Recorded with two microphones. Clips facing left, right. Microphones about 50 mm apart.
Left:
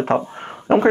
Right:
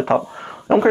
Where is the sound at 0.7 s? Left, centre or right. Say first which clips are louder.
Even; left.